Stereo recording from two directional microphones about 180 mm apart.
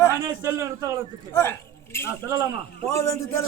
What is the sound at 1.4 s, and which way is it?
A man's voice, 15° left (ahead or behind).